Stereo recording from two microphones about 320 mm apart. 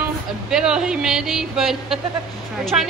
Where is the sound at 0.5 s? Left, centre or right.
Centre.